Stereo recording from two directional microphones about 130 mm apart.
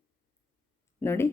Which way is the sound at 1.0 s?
15° left (ahead or behind).